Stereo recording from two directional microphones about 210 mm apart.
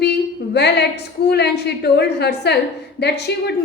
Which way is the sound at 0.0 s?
55° left (ahead or behind).